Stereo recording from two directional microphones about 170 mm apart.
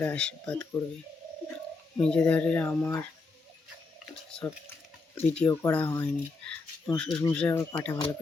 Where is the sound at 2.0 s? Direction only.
5° left (ahead or behind).